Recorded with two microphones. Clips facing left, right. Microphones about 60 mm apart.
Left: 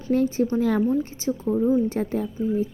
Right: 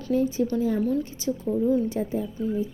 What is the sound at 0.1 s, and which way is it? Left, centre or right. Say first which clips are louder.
Speech: left 2 dB; left.